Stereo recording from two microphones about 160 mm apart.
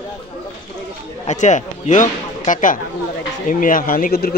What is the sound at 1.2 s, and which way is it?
Speech, 45° left (ahead or behind).